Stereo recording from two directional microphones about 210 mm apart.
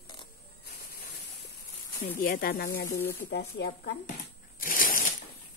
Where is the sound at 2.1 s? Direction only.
45° left (ahead or behind).